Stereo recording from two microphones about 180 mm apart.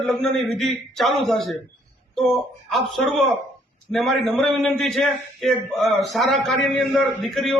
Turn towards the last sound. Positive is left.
turn(degrees=0)  # may be behind; listen again after turning